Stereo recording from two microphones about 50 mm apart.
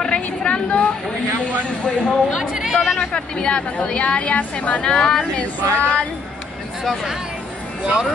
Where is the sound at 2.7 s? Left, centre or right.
Centre.